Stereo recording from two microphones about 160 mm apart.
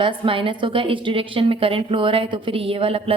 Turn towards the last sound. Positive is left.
turn(degrees=-35)  # may be behind; listen again after turning